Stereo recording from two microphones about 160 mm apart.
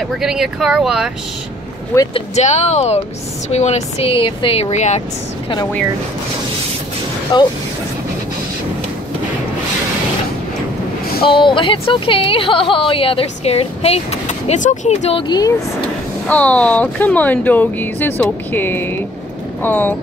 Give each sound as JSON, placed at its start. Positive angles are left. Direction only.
{"t": 0.2, "sound": "speech", "side_deg": -5}
{"t": 2.1, "sound": "speech", "side_deg": 45}
{"t": 7.3, "sound": "speech", "side_deg": 25}
{"t": 11.2, "sound": "speech", "side_deg": 30}
{"t": 16.3, "sound": "speech", "side_deg": 10}